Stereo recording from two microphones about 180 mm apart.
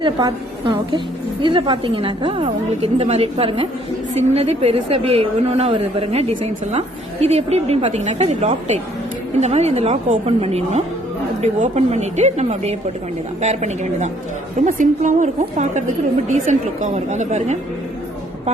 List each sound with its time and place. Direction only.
0.0 s a woman's voice: 25° right (ahead or behind); by 17.6 s 40° right (ahead or behind)